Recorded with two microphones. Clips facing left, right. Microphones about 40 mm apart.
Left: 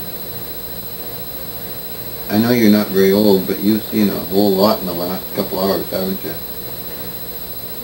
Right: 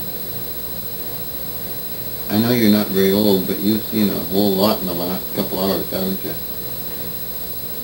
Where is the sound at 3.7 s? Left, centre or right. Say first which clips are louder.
Left 3 dB; centre.